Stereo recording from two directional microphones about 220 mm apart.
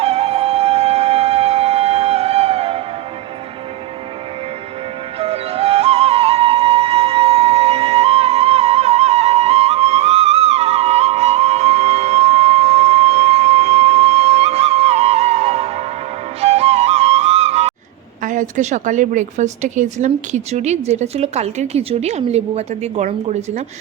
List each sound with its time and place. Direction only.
0.0 s flute: 25° right (ahead or behind)
5.2 s flute: 25° right (ahead or behind)
18.2 s a woman's voice: 35° right (ahead or behind)